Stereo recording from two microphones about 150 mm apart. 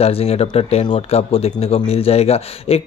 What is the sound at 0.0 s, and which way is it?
Speech, 40° left (ahead or behind).